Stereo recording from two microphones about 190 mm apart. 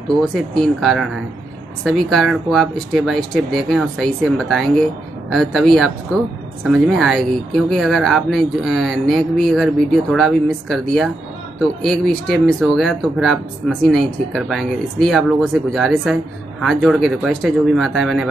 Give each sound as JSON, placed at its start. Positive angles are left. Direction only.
{"t": 0.2, "sound": "speech", "side_deg": 0}